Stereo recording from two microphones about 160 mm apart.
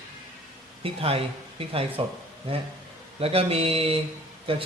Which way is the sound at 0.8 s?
35° right (ahead or behind).